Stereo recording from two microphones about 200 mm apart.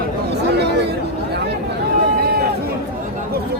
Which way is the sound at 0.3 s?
55° right (ahead or behind).